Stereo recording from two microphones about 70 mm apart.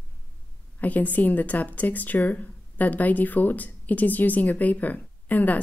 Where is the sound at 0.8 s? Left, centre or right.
Left.